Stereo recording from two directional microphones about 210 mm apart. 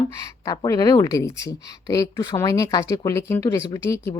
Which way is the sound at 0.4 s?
15° left (ahead or behind).